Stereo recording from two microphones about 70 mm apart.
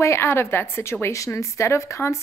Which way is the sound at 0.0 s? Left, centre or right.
Left.